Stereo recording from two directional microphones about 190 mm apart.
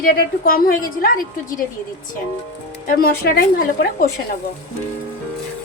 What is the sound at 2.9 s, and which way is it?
A woman's voice, 50° left (ahead or behind).